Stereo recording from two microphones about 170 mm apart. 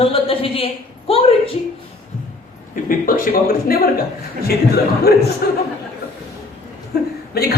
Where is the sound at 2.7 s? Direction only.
55° left (ahead or behind).